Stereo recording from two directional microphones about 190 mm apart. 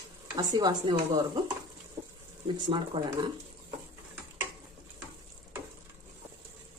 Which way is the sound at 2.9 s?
30° right (ahead or behind).